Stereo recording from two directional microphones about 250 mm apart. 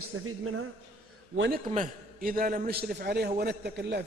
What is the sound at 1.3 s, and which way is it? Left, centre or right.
A man's voice, right.